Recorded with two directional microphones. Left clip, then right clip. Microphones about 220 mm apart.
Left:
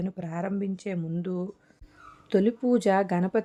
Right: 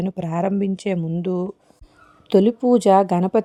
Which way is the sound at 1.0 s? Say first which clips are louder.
Right 9 dB; 25° right (ahead or behind).